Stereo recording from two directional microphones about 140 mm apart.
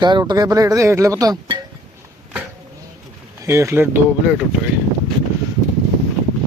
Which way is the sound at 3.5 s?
20° right (ahead or behind).